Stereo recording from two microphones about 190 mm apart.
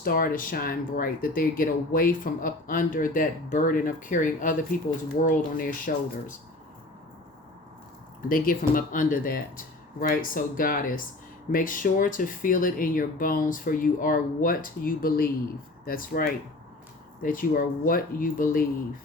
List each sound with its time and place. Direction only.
0.0 s speech: 50° left (ahead or behind)
8.3 s speech: 45° left (ahead or behind)